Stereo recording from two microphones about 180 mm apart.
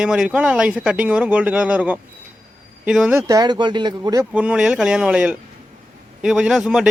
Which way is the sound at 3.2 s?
20° right (ahead or behind).